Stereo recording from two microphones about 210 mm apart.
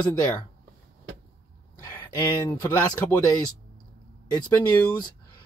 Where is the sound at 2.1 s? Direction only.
10° left (ahead or behind).